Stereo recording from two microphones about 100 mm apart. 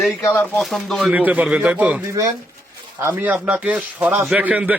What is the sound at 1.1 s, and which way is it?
Speech, 15° right (ahead or behind).